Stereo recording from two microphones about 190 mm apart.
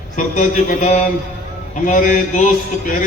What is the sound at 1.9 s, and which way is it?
Mantra, 45° left (ahead or behind).